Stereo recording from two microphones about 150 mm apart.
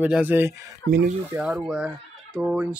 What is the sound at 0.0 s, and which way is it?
Speech, 10° right (ahead or behind).